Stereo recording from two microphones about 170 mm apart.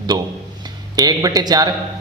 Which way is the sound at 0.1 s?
20° right (ahead or behind).